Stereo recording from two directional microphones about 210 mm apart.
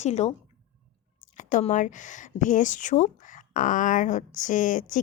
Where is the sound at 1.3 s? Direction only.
35° left (ahead or behind).